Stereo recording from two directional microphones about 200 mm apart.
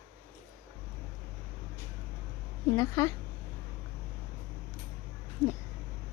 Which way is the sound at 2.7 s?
15° left (ahead or behind).